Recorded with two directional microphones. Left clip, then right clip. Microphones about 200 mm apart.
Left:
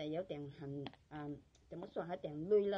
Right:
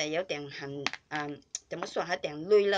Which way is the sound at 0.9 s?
50° right (ahead or behind).